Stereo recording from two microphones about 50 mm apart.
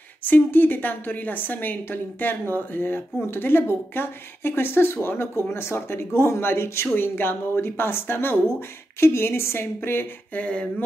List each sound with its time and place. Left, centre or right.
0.2 s a woman's voice: left
6.9 s speech: left
10.3 s a sound: left